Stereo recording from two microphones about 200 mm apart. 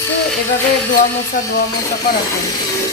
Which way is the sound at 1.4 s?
40° left (ahead or behind).